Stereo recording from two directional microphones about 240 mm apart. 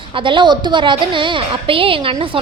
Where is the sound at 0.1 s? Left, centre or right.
Right.